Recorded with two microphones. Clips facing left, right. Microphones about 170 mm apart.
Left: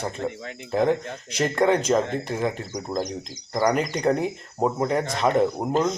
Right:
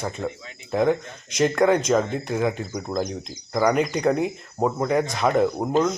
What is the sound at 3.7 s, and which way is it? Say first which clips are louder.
Speech: right 1 dB; centre (ahead or behind).